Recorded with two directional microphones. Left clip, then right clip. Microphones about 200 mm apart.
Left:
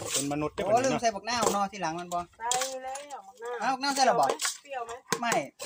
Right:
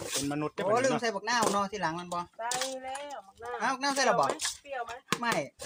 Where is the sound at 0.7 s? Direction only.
30° right (ahead or behind).